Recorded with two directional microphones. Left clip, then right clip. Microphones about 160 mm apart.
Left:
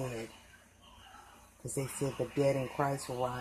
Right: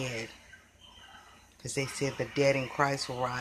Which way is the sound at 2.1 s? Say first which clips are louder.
Right 4 dB; 15° right (ahead or behind).